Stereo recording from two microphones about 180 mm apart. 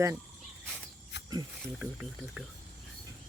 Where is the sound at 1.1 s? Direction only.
75° left (ahead or behind).